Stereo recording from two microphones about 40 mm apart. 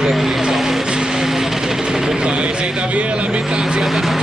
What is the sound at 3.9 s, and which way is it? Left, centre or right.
Speech, centre.